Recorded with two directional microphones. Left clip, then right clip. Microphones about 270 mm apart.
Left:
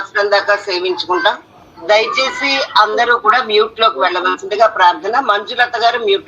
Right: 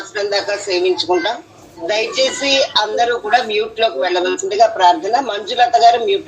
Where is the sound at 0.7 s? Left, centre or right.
Left.